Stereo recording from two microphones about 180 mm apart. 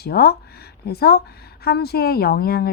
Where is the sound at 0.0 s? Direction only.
60° left (ahead or behind).